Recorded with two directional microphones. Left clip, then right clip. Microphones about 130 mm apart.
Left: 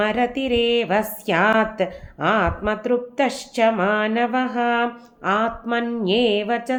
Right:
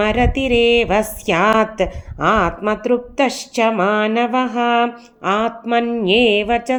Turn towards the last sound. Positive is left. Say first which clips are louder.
# right 5 dB
turn(degrees=-30)  # may be behind; listen again after turning